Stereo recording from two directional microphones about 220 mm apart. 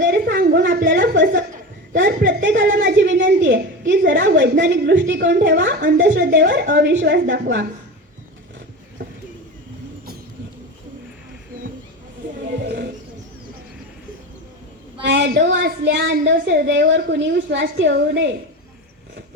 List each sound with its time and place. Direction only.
0.0 s a sound: 45° right (ahead or behind)
1.9 s a woman's voice: 50° right (ahead or behind)
2.8 s a sound: 55° right (ahead or behind)
4.2 s a woman's voice: 50° right (ahead or behind)
12.6 s roaring cats: 50° right (ahead or behind)
15.0 s a woman's voice: 50° right (ahead or behind)